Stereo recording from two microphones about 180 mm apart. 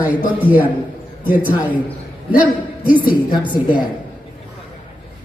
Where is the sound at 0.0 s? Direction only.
10° right (ahead or behind).